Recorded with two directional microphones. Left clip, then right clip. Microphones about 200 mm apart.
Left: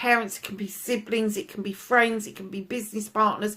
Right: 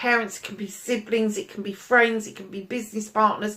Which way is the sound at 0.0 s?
50° left (ahead or behind).